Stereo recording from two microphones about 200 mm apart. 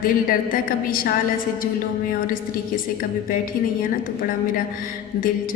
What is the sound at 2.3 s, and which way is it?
Speech, 45° left (ahead or behind).